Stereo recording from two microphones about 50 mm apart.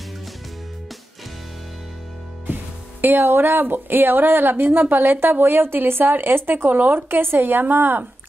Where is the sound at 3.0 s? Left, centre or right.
Right.